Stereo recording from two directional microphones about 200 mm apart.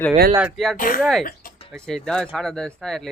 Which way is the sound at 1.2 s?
45° left (ahead or behind).